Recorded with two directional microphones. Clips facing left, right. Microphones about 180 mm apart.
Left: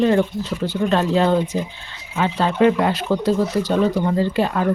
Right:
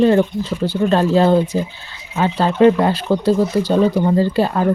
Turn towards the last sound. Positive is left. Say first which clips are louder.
# right 3 dB
turn(degrees=-35)  # may be behind; listen again after turning